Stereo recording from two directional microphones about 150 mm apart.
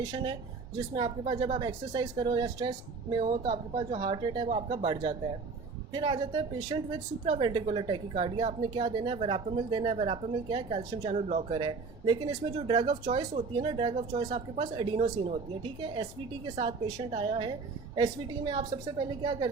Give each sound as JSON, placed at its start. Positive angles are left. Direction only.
{"t": 0.0, "sound": "a woman's voice", "side_deg": -30}
{"t": 4.4, "sound": "a woman's voice", "side_deg": -45}
{"t": 11.5, "sound": "a woman's voice", "side_deg": -35}
{"t": 16.6, "sound": "a woman's voice", "side_deg": -35}